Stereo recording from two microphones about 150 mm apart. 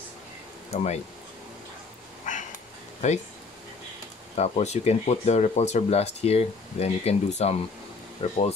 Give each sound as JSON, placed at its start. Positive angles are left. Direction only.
{"t": 0.7, "sound": "speech", "side_deg": 45}
{"t": 2.3, "sound": "cat", "side_deg": 55}
{"t": 4.4, "sound": "speech", "side_deg": 45}